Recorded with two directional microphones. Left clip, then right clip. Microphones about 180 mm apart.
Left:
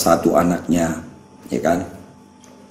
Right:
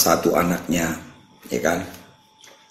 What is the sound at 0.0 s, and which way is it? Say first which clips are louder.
Speech: left 3 dB; 40° right (ahead or behind).